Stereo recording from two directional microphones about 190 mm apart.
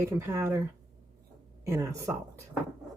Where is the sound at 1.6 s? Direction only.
15° right (ahead or behind).